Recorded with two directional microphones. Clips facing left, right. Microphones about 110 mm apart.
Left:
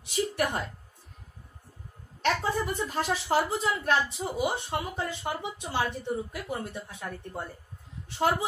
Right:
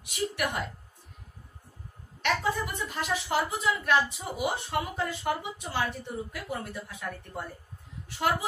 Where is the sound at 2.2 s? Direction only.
30° left (ahead or behind).